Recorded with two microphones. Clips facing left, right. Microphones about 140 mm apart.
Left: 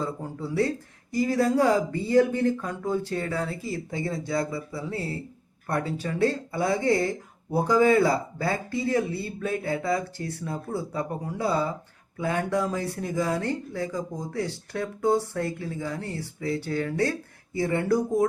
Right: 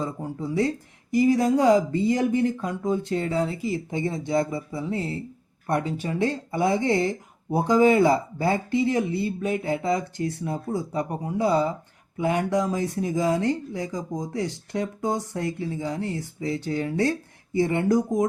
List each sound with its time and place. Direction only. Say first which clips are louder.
0.0 s speech: right 2 dB; 15° right (ahead or behind)